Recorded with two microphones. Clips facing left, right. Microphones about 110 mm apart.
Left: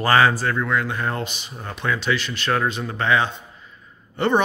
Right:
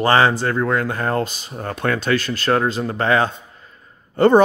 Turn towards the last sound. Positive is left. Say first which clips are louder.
# right 7 dB
turn(degrees=-40)  # may be behind; listen again after turning